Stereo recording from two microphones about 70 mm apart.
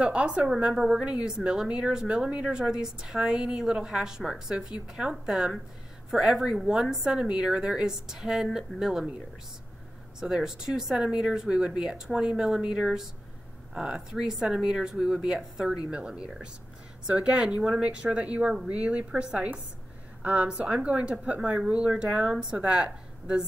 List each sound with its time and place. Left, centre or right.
0.0 s a woman's voice: centre
10.2 s a woman's voice: centre